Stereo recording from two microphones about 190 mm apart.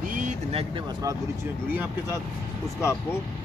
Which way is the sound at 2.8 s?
15° left (ahead or behind).